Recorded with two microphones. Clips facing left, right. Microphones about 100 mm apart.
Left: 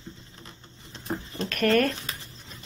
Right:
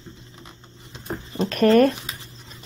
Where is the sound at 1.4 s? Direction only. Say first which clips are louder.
Right 7 dB; 20° right (ahead or behind).